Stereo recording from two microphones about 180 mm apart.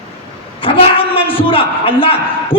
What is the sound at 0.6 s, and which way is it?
A man's voice, 30° left (ahead or behind).